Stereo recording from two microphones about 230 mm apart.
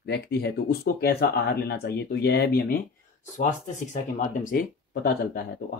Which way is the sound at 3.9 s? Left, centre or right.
Left.